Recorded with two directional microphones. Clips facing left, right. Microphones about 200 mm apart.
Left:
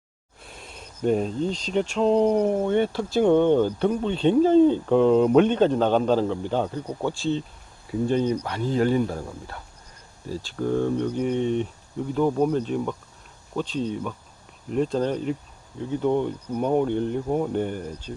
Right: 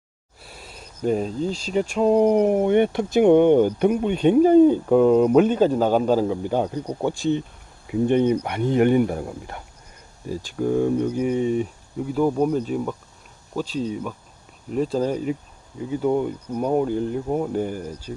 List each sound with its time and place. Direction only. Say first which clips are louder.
0.4 s speech: even; 5° right (ahead or behind)